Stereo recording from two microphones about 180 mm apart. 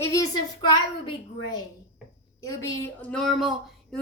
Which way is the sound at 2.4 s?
15° left (ahead or behind).